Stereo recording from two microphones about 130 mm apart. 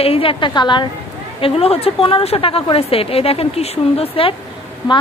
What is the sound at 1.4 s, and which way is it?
Speech, 45° left (ahead or behind).